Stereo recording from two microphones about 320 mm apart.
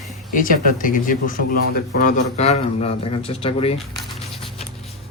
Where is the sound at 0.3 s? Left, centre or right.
Left.